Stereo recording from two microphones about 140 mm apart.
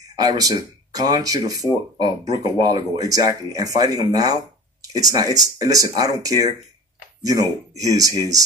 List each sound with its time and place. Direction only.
0.0 s speech: 25° right (ahead or behind)